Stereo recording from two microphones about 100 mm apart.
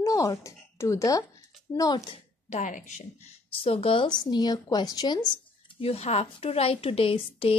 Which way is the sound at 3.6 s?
65° left (ahead or behind).